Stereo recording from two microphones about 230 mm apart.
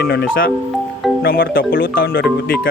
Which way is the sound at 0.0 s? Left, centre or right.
Left.